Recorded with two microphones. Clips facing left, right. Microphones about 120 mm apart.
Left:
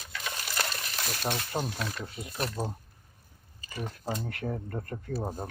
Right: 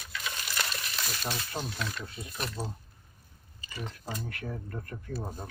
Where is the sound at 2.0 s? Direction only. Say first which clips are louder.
Left 2 dB; 25° left (ahead or behind).